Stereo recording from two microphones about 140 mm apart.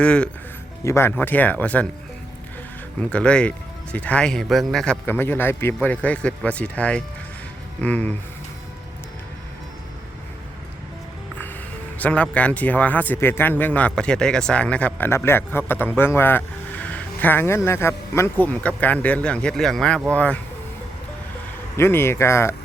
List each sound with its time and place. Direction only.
0.0 s speech: 5° left (ahead or behind)
0.9 s speech: 20° left (ahead or behind)
3.0 s speech: 10° left (ahead or behind)
5.0 s speech: 15° left (ahead or behind)
11.9 s speech: 10° left (ahead or behind)
21.8 s speech: 15° left (ahead or behind)